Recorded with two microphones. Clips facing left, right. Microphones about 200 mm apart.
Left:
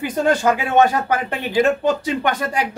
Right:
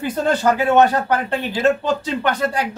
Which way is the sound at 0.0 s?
10° left (ahead or behind).